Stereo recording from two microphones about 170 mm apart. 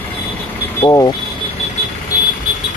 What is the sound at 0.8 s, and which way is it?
Speech, 20° left (ahead or behind).